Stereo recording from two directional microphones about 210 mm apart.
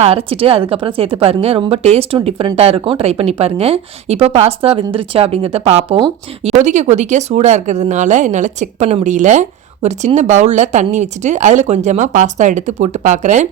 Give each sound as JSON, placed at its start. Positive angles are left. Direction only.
{"t": 0.0, "sound": "speech", "side_deg": -30}